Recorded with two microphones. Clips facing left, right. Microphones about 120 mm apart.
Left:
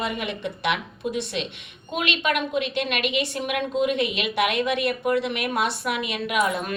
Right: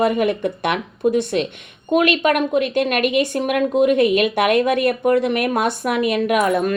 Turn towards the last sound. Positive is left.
turn(degrees=-50)  # may be behind; listen again after turning